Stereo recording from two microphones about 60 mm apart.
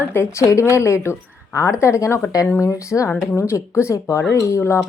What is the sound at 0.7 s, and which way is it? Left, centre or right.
A woman's voice, left.